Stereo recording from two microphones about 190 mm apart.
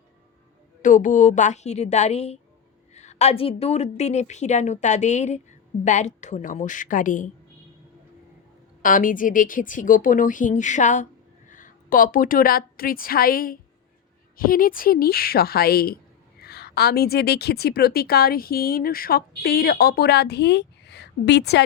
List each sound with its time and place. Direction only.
0.8 s a woman's voice: 45° left (ahead or behind)
8.8 s a woman's voice: 45° left (ahead or behind); by 21.6 s 60° left (ahead or behind)